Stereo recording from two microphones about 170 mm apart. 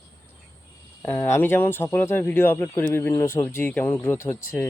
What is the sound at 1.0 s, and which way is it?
Speech, 10° left (ahead or behind).